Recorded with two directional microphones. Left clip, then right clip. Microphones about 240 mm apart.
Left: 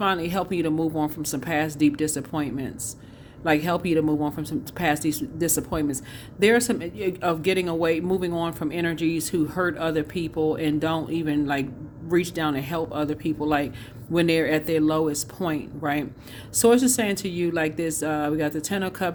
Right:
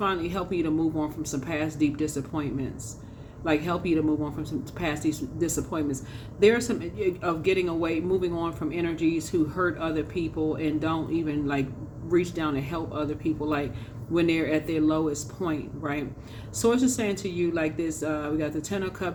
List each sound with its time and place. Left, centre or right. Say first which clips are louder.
0.0 s speech: left 4 dB; left